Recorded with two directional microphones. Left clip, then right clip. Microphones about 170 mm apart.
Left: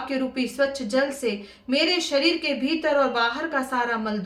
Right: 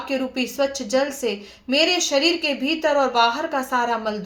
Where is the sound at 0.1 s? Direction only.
15° right (ahead or behind).